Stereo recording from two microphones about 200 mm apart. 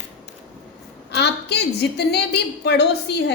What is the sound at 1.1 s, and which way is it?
A woman's voice, 55° left (ahead or behind).